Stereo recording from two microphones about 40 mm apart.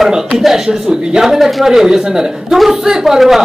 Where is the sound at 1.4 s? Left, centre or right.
Centre.